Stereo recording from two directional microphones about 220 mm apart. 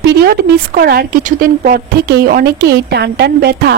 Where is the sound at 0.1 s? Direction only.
45° right (ahead or behind).